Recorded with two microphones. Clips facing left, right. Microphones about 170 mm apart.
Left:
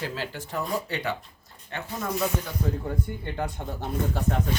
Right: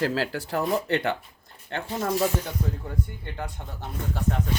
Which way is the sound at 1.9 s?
30° right (ahead or behind).